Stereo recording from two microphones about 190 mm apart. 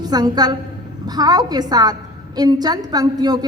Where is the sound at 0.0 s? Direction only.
20° right (ahead or behind).